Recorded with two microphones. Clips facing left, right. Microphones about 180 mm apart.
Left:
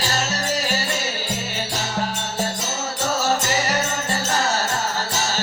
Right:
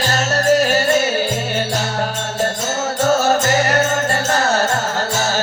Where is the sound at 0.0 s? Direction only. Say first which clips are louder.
Right 7 dB; 55° right (ahead or behind).